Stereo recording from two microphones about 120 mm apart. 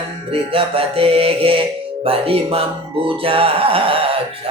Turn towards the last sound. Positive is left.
turn(degrees=-50)  # may be behind; listen again after turning